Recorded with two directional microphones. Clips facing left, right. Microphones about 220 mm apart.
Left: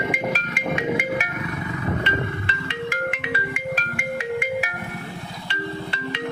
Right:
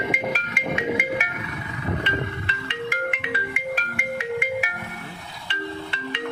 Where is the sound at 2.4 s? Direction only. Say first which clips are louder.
Left 2 dB; 40° left (ahead or behind).